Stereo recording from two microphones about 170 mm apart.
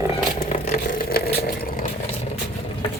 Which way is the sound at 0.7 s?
65° left (ahead or behind).